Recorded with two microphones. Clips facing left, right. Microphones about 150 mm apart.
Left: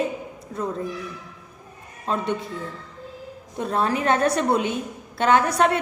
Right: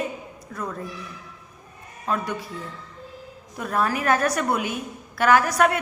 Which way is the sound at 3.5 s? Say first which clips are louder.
Left 1 dB; 25° left (ahead or behind).